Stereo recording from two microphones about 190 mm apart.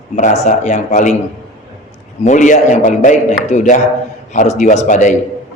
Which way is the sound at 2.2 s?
40° left (ahead or behind).